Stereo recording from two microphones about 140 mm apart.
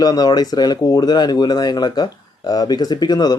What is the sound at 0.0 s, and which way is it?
A man's voice, 25° left (ahead or behind).